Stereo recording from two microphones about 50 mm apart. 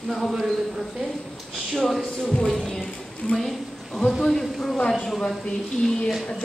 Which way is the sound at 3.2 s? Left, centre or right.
Left.